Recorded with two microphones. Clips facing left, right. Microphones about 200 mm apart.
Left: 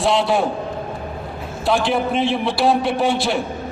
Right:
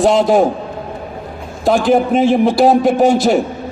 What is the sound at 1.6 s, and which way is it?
A man's voice, 45° right (ahead or behind).